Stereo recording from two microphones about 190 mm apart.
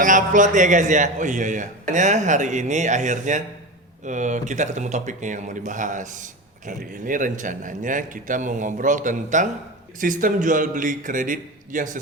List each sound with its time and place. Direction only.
0.0 s a man's voice: 45° right (ahead or behind)